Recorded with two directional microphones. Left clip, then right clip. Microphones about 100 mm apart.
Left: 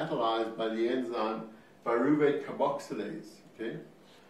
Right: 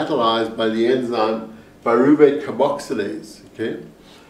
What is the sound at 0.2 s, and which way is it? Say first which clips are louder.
Speech: right 11 dB; 40° right (ahead or behind).